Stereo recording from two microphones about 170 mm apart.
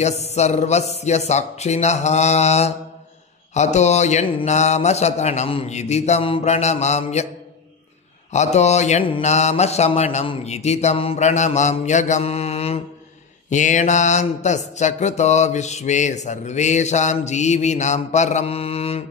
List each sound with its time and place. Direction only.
0.0 s speech: 40° left (ahead or behind)
8.3 s speech: 40° left (ahead or behind)
13.5 s mantra: 45° left (ahead or behind)